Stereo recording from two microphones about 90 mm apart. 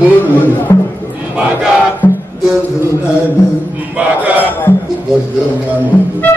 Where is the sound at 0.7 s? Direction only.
40° left (ahead or behind).